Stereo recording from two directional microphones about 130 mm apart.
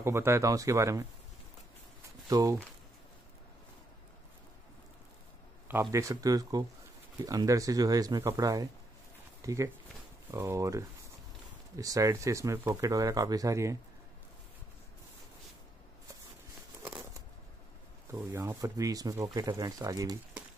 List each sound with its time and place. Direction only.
0.0 s speech: 20° right (ahead or behind)
2.2 s speech: 30° right (ahead or behind)
5.7 s speech: 20° right (ahead or behind)
18.1 s speech: 20° right (ahead or behind)